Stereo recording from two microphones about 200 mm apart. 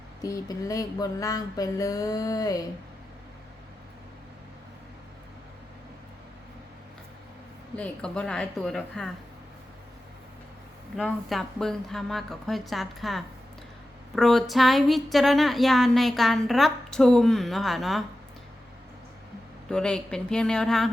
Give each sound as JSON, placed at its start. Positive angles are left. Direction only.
{"t": 0.2, "sound": "a sound", "side_deg": 15}
{"t": 7.8, "sound": "speech", "side_deg": 5}
{"t": 10.9, "sound": "speech", "side_deg": 0}
{"t": 19.7, "sound": "speech", "side_deg": 5}